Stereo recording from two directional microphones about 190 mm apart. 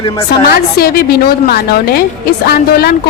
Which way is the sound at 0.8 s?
55° left (ahead or behind).